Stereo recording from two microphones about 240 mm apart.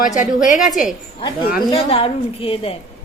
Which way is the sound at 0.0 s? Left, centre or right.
Left.